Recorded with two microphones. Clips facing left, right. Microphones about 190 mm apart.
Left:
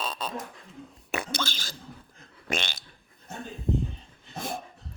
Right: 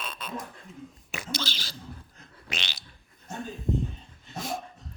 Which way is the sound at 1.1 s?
55° left (ahead or behind).